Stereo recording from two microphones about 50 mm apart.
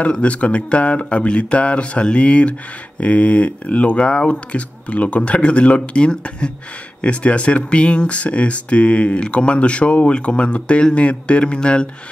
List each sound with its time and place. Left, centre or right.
0.0 s speech: left